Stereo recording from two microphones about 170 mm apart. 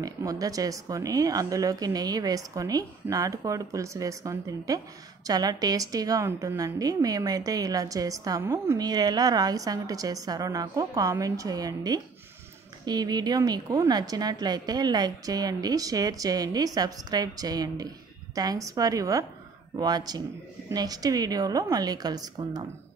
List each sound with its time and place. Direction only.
0.0 s speech: 20° right (ahead or behind)